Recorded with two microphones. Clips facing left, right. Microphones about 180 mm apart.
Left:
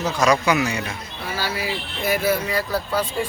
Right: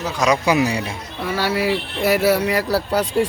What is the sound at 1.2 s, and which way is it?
Speech, 65° right (ahead or behind).